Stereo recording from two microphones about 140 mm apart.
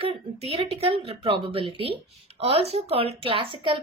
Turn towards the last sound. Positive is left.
turn(degrees=-40)  # may be behind; listen again after turning